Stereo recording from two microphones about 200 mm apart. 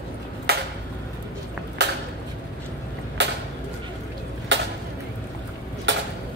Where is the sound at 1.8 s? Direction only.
60° right (ahead or behind).